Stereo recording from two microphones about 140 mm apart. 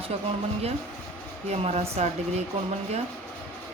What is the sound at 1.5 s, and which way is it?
Speech, 50° right (ahead or behind).